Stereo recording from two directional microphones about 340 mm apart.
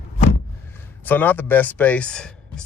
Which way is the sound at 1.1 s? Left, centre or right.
Centre.